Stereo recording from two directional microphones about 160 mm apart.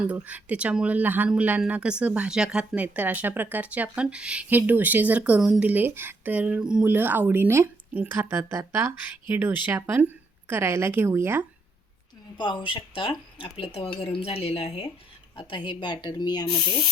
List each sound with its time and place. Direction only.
0.0 s speech: 10° right (ahead or behind)
12.4 s a woman's voice: 30° left (ahead or behind)